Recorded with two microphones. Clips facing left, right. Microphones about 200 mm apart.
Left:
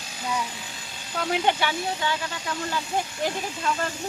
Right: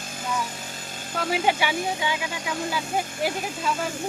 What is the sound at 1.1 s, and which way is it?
Speech, 5° right (ahead or behind).